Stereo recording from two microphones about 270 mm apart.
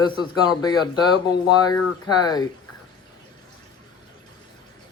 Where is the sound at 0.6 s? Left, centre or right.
Centre.